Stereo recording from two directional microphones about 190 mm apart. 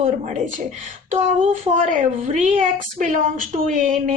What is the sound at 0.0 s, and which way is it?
A woman's voice, 40° right (ahead or behind).